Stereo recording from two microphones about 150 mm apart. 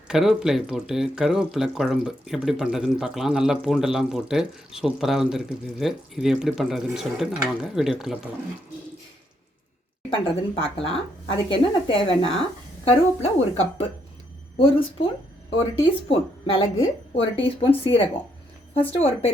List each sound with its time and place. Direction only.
0.1 s speech: 5° right (ahead or behind)
10.1 s a woman's voice: 35° left (ahead or behind)
15.5 s speech: 35° left (ahead or behind)